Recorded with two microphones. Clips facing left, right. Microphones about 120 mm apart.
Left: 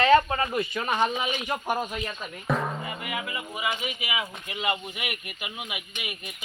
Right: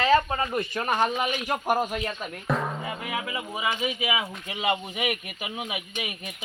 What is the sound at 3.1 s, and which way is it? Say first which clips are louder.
Speech: right 3 dB; 25° right (ahead or behind).